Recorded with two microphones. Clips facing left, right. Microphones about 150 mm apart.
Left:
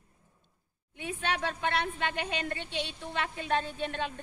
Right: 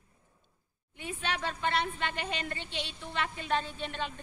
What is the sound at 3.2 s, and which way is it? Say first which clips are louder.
Speech: left 1 dB; 50° left (ahead or behind).